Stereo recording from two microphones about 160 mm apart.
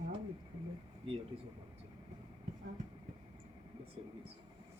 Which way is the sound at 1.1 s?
35° right (ahead or behind).